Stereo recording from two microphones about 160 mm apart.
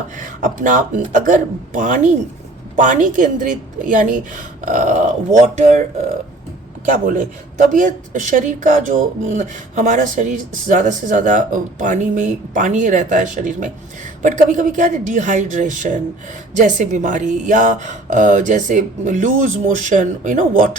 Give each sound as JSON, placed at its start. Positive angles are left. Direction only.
{"t": 0.2, "sound": "speech", "side_deg": -55}
{"t": 6.8, "sound": "speech", "side_deg": -50}